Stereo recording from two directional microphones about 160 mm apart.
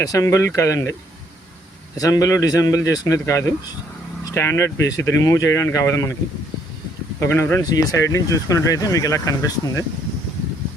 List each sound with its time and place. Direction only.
0.0 s speech: 20° left (ahead or behind)
2.0 s speech: 20° left (ahead or behind)
7.2 s speech: 15° left (ahead or behind)